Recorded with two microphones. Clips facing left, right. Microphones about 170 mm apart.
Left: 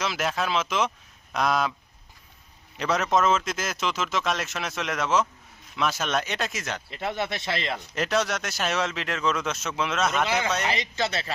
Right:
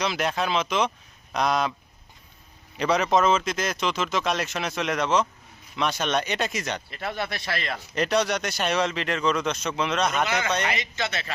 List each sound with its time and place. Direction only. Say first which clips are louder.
0.0 s speech: right 2 dB; centre (ahead or behind)
2.7 s speech: right 2 dB; centre (ahead or behind)
6.9 s speech: left 1 dB; 20° left (ahead or behind)
7.9 s speech: right 3 dB; centre (ahead or behind)
10.7 s speech: left 2 dB; 35° left (ahead or behind)